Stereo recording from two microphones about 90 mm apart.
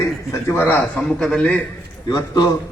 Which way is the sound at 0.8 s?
10° left (ahead or behind).